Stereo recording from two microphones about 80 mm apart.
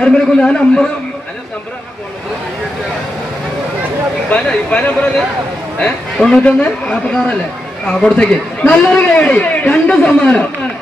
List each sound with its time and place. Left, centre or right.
0.0 s a man's voice: centre
4.3 s a man's voice: centre